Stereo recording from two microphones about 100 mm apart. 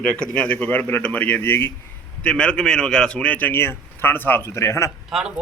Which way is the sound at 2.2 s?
10° left (ahead or behind).